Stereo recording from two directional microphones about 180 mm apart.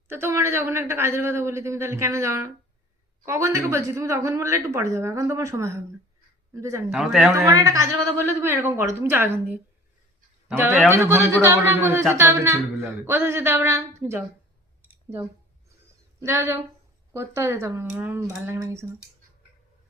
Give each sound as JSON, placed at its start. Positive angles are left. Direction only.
{"t": 0.1, "sound": "speech", "side_deg": -15}
{"t": 6.9, "sound": "speech", "side_deg": 0}
{"t": 7.3, "sound": "speech", "side_deg": -20}
{"t": 16.2, "sound": "speech", "side_deg": -15}